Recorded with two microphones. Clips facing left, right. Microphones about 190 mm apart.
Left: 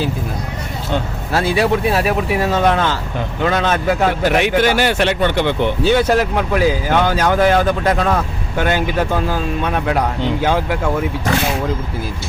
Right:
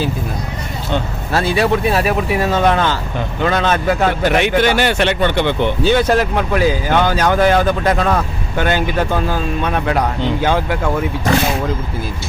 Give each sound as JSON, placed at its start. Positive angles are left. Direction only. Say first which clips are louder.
{"t": 0.9, "sound": "a man's voice", "louder": "right 1 dB", "side_deg": 5}